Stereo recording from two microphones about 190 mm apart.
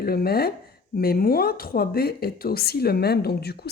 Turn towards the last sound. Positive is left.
turn(degrees=60)  # may be behind; listen again after turning